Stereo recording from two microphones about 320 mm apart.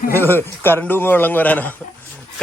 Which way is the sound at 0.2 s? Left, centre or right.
Centre.